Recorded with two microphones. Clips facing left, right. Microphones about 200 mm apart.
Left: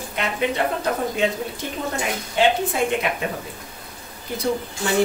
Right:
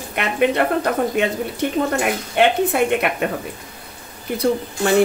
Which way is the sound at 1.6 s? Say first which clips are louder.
Right 9 dB; 65° right (ahead or behind).